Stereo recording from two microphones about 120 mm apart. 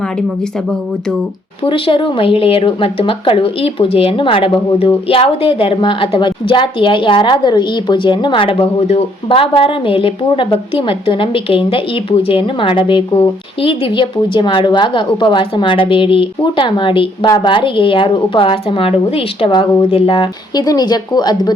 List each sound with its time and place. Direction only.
1.6 s speech: 45° left (ahead or behind)
20.6 s speech: 35° left (ahead or behind)